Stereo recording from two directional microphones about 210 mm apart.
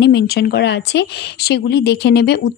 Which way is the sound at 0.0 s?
50° left (ahead or behind).